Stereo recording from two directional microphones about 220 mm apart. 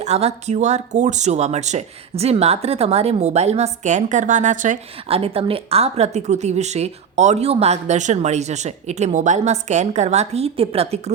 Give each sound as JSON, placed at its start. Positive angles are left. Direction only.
{"t": 0.0, "sound": "speech", "side_deg": -30}